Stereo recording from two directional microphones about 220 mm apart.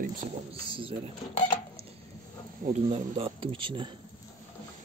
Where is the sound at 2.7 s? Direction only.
25° right (ahead or behind).